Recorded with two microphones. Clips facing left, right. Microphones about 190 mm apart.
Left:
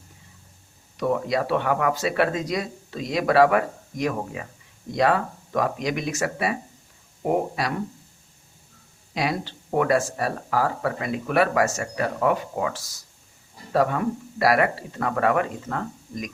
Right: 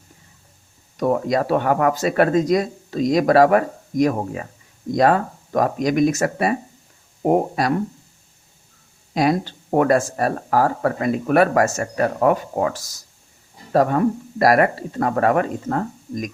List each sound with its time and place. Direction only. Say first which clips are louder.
0.9 s speech: right 4 dB; 45° right (ahead or behind)
9.1 s speech: right 7 dB; 45° right (ahead or behind)